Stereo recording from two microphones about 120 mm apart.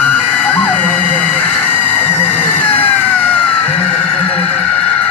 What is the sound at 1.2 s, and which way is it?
Chicken, 15° left (ahead or behind).